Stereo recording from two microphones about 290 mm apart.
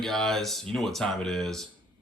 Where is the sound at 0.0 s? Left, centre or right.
Centre.